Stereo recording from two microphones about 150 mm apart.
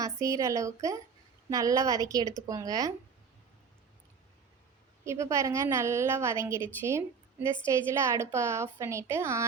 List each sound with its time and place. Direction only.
0.0 s a woman's voice: 20° right (ahead or behind)
5.0 s a woman's voice: 20° right (ahead or behind)